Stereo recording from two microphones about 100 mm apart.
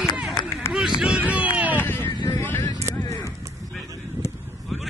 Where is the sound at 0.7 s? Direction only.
5° right (ahead or behind).